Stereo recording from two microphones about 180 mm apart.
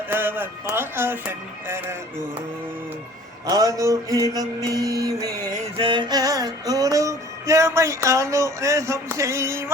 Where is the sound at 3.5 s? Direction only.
20° right (ahead or behind).